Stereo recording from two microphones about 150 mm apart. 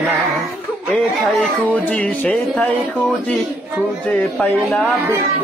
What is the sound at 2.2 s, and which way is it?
Music, 10° left (ahead or behind).